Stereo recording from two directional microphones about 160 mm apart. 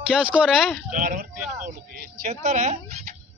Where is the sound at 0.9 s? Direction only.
55° right (ahead or behind).